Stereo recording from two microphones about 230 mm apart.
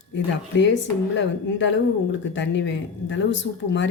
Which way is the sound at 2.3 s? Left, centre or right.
Left.